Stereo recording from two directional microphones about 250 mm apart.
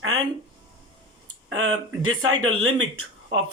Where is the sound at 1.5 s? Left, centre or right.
Right.